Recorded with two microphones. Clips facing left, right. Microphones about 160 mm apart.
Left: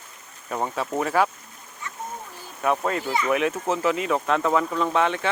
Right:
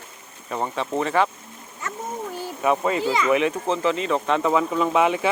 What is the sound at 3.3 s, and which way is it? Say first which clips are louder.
Speech: even; centre (ahead or behind).